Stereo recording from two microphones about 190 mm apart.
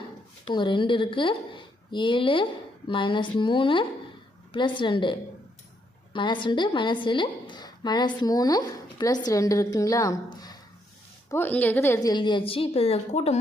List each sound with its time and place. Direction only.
0.4 s a woman's voice: 25° left (ahead or behind)
6.1 s a woman's voice: 25° left (ahead or behind)